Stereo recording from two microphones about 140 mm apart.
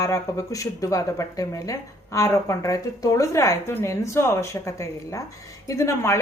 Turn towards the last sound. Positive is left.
turn(degrees=20)  # may be behind; listen again after turning